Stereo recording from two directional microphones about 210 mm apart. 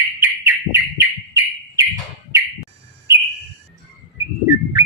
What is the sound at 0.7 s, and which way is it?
Bird, 10° right (ahead or behind).